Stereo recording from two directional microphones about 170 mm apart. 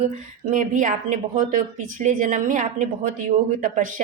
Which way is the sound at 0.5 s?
50° right (ahead or behind).